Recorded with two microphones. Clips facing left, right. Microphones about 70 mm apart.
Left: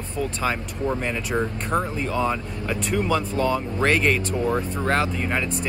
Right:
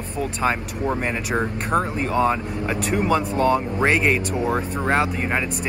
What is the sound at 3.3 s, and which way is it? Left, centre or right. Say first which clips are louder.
Speech: right 4 dB; right.